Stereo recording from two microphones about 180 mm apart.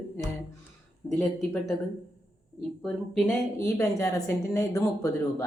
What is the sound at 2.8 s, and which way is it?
Speech, centre (ahead or behind).